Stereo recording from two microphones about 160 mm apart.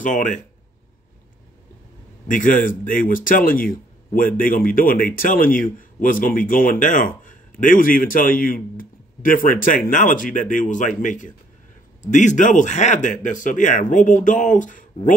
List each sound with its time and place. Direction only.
0.0 s speech: 55° left (ahead or behind)
2.2 s speech: 55° left (ahead or behind)